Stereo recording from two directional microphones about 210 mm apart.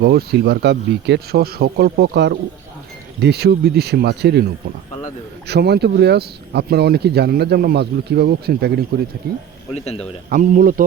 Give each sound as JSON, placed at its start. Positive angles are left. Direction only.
{"t": 0.0, "sound": "speech", "side_deg": -50}
{"t": 5.5, "sound": "speech", "side_deg": -50}
{"t": 9.7, "sound": "speech", "side_deg": 30}
{"t": 10.2, "sound": "speech", "side_deg": -40}